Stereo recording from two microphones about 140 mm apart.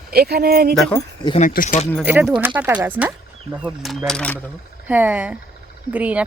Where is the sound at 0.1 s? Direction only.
90° right.